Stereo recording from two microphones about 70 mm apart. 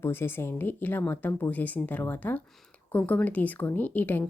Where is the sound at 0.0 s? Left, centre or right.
Left.